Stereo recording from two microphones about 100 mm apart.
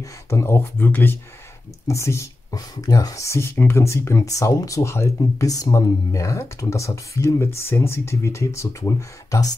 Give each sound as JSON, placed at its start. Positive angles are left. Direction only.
{"t": 0.0, "sound": "speech", "side_deg": 30}